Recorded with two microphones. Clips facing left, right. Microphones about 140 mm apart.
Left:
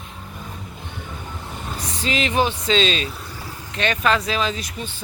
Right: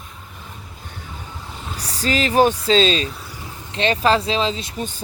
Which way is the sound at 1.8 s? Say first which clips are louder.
Right 3 dB; 35° right (ahead or behind).